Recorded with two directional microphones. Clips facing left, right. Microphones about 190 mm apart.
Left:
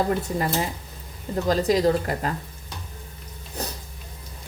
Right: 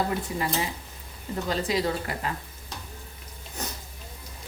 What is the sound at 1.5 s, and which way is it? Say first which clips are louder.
Speech: left 7 dB; 40° left (ahead or behind).